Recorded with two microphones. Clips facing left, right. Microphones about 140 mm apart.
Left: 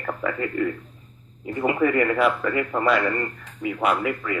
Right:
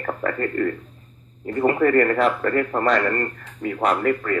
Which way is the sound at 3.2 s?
45° right (ahead or behind).